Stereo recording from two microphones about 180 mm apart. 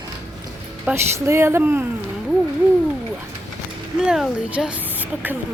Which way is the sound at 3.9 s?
5° right (ahead or behind).